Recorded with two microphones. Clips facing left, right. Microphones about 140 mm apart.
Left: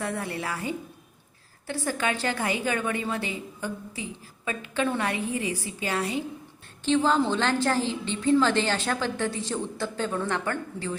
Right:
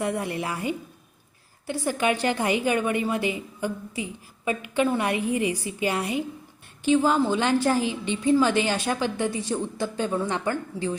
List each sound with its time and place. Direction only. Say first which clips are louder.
0.0 s a woman's voice: right 4 dB; 15° right (ahead or behind)